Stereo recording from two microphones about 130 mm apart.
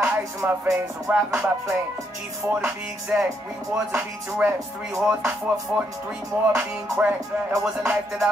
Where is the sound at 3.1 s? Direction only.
10° right (ahead or behind).